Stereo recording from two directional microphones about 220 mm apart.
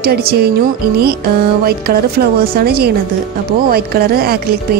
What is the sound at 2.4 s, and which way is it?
Music, 45° right (ahead or behind).